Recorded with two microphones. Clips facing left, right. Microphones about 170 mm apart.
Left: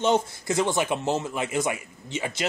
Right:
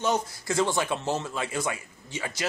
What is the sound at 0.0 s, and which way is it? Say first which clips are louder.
A man's voice: left 4 dB; 25° left (ahead or behind).